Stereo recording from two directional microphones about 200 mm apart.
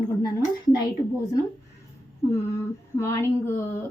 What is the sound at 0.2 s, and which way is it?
Speech, 20° left (ahead or behind).